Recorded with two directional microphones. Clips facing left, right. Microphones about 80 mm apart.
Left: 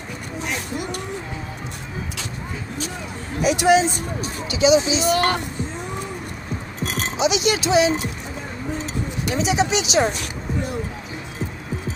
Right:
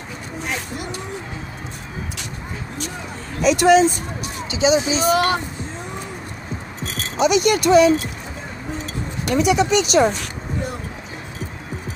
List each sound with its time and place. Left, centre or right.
3.3 s speech: right
4.5 s speech: right
7.2 s speech: right
9.2 s speech: right